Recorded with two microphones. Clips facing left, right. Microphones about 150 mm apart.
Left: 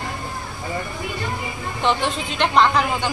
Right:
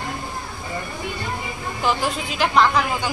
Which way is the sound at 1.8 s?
5° right (ahead or behind).